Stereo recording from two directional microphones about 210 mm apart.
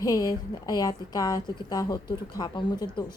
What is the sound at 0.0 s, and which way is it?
A woman's voice, 20° left (ahead or behind).